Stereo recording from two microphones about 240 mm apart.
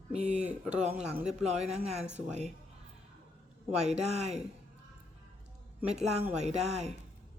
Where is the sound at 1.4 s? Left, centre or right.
Right.